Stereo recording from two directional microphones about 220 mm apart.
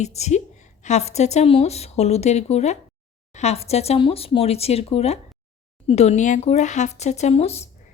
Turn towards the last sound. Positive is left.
turn(degrees=30)  # may be behind; listen again after turning